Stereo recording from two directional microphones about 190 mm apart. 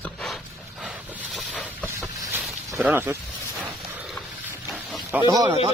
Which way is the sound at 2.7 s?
10° right (ahead or behind).